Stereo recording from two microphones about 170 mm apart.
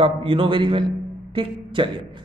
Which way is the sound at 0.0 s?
30° right (ahead or behind).